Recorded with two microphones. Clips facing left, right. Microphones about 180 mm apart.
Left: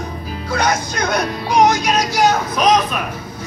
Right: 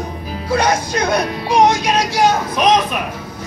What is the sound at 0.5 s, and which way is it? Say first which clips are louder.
Speech: right 3 dB; 30° right (ahead or behind).